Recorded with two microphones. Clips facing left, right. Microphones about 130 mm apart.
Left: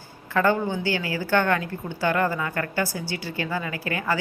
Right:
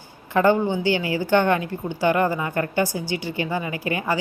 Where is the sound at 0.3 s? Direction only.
20° right (ahead or behind).